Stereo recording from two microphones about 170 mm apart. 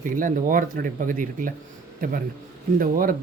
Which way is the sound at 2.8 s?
55° right (ahead or behind).